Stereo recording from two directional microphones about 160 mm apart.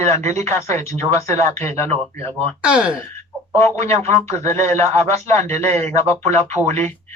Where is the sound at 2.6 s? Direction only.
5° right (ahead or behind).